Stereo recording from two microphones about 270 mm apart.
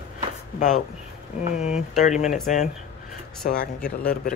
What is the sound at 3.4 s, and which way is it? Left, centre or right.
Speech, left.